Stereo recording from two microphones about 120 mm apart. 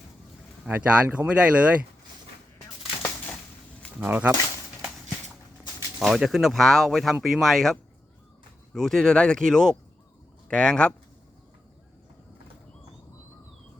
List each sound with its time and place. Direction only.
0.7 s speech: 15° right (ahead or behind)
4.0 s speech: 10° right (ahead or behind)
6.0 s speech: centre (ahead or behind)